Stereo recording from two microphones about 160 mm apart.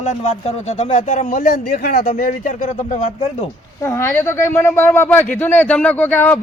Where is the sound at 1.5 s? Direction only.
65° left (ahead or behind).